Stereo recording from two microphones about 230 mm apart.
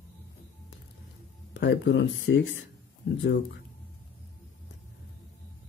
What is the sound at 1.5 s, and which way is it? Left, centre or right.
Speech, left.